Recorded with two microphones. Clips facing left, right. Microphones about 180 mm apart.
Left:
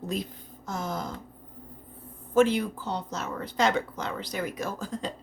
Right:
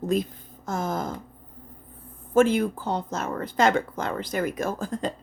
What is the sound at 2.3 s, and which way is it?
Speech, 50° right (ahead or behind).